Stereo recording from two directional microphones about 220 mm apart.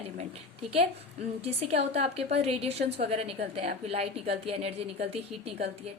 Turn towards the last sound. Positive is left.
turn(degrees=-25)  # may be behind; listen again after turning